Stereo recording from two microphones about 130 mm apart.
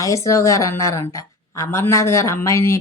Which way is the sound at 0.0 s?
25° left (ahead or behind).